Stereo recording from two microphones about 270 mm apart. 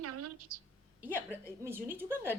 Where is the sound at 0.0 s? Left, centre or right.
Right.